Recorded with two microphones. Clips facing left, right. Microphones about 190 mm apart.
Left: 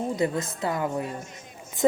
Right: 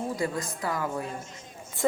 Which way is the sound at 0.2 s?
25° left (ahead or behind).